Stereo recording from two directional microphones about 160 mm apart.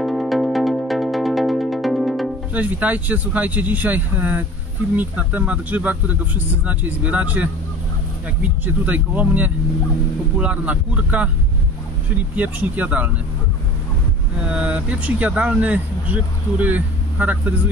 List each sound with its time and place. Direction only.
0.0 s music: centre (ahead or behind)
4.9 s speech: 10° right (ahead or behind)
12.4 s speech: 10° right (ahead or behind)
14.4 s speech: 10° right (ahead or behind)